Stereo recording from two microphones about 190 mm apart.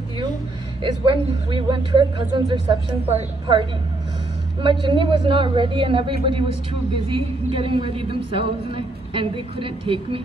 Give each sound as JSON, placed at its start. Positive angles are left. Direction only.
{"t": 1.0, "sound": "a woman's voice", "side_deg": -25}
{"t": 7.5, "sound": "a woman's voice", "side_deg": -30}